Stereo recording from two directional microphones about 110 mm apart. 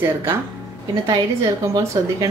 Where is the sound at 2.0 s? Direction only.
30° right (ahead or behind).